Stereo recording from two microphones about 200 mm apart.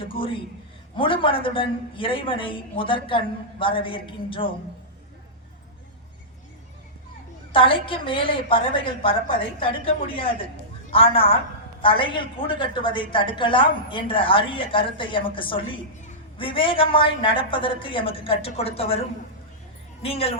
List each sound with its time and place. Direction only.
0.0 s a woman's voice: 25° left (ahead or behind)
7.5 s a woman's voice: 25° left (ahead or behind)